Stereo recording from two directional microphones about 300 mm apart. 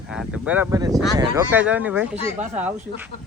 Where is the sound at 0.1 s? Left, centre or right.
Centre.